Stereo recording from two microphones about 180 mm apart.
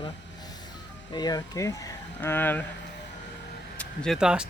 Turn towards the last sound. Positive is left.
turn(degrees=-5)  # may be behind; listen again after turning